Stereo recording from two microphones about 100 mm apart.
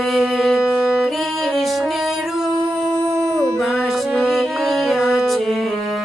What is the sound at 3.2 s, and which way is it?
Dog, 30° right (ahead or behind).